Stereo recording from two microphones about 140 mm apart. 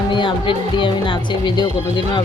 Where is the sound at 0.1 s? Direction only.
35° left (ahead or behind).